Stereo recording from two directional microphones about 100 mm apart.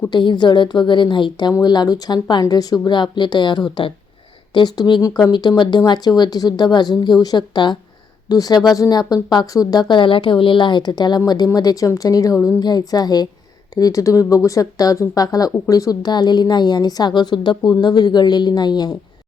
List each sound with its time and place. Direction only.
0.1 s a woman's voice: 50° left (ahead or behind)
8.3 s a woman's voice: 40° left (ahead or behind)